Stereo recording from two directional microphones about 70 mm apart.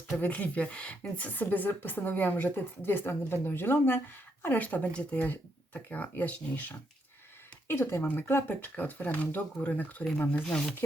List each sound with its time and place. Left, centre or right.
0.2 s speech: left
7.7 s speech: left
10.4 s speech: centre